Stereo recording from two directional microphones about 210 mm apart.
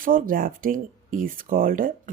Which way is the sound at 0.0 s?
40° right (ahead or behind).